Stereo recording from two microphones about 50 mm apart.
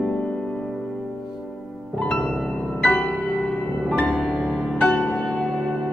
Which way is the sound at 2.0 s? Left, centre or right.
Centre.